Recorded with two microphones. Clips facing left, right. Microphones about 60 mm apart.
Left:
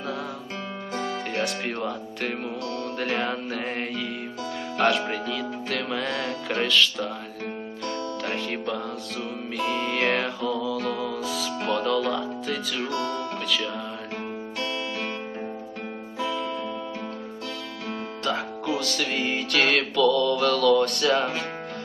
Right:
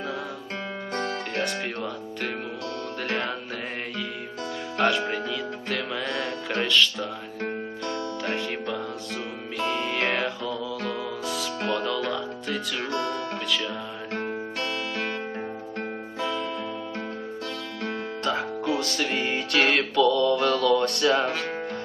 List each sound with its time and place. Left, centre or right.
0.9 s music: centre
4.8 s music: centre
9.6 s music: centre
9.8 s music: centre
16.2 s music: centre
18.3 s music: centre
18.9 s music: centre
20.4 s mantra: centre
21.1 s music: centre